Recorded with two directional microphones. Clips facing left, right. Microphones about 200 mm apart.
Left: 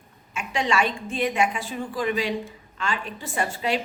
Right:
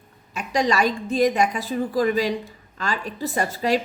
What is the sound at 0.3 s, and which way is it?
A woman's voice, 40° right (ahead or behind).